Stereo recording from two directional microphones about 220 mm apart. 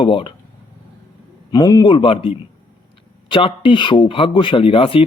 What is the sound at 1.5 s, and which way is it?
Speech, 15° left (ahead or behind).